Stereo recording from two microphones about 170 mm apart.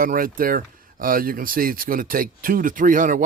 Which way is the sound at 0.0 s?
55° right (ahead or behind).